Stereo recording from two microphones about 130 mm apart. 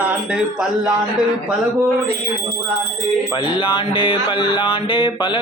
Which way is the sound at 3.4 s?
40° left (ahead or behind).